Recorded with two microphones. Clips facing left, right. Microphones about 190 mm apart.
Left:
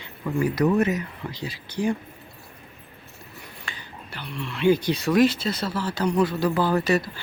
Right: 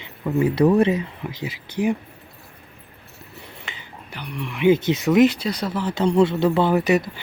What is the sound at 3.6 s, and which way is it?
Speech, 15° right (ahead or behind).